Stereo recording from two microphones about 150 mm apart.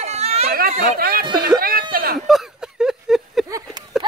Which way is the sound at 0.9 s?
80° right.